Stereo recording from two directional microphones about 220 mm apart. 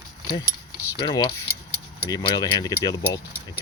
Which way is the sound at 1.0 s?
20° left (ahead or behind).